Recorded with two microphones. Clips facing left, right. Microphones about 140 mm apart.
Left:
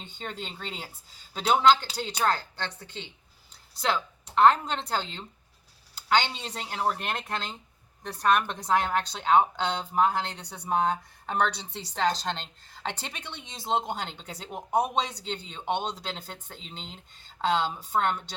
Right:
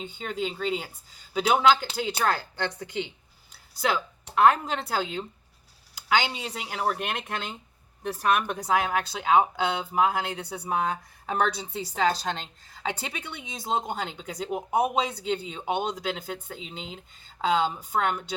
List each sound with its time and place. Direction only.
0.0 s a woman's voice: 5° right (ahead or behind)